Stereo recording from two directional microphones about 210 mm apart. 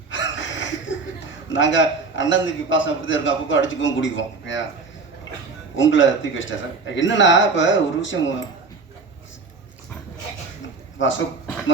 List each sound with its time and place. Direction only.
0.1 s a sound: 60° left (ahead or behind)
1.5 s a man's voice: 65° left (ahead or behind)
5.7 s a man's voice: 65° left (ahead or behind)
10.9 s speech: 60° left (ahead or behind)